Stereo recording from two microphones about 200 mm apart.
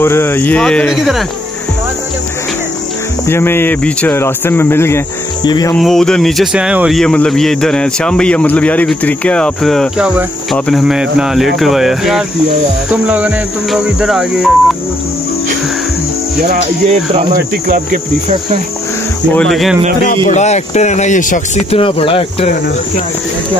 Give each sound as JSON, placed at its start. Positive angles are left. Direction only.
{"t": 0.0, "sound": "speech", "side_deg": 10}
{"t": 3.3, "sound": "speech", "side_deg": 10}
{"t": 5.8, "sound": "speech", "side_deg": 0}
{"t": 16.8, "sound": "speech", "side_deg": -35}
{"t": 19.3, "sound": "speech", "side_deg": 0}
{"t": 20.2, "sound": "speech", "side_deg": 35}